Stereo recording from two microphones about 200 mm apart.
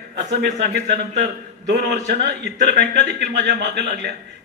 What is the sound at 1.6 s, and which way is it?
A man's voice, 55° right (ahead or behind).